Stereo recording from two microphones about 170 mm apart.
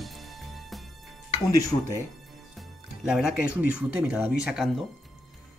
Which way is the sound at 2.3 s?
Centre (ahead or behind).